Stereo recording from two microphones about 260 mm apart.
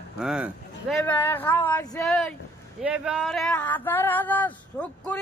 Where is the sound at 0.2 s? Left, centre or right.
Centre.